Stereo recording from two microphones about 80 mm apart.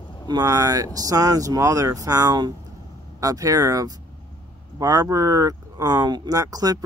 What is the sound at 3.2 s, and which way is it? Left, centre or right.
Speech, right.